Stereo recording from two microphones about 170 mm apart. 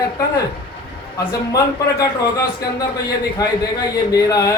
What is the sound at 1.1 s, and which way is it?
A man's voice, 20° left (ahead or behind).